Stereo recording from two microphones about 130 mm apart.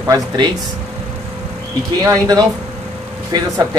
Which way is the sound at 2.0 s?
25° right (ahead or behind).